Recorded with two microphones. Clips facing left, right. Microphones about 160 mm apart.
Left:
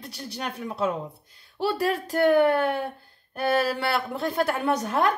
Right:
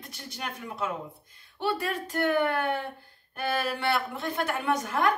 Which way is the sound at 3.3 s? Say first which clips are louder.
Left 6 dB; 35° left (ahead or behind).